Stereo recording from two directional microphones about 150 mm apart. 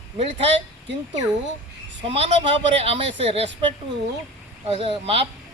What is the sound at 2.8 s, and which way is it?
Speech, 40° right (ahead or behind).